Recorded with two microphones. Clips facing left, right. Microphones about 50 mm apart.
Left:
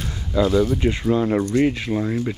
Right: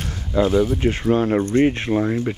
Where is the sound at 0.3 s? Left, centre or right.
Centre.